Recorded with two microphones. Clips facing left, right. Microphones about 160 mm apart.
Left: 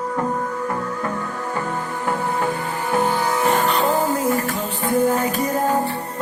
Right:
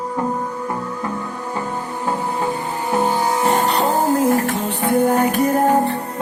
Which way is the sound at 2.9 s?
20° right (ahead or behind).